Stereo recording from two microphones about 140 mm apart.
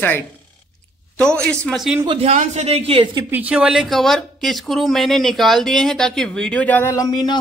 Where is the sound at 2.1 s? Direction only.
50° right (ahead or behind).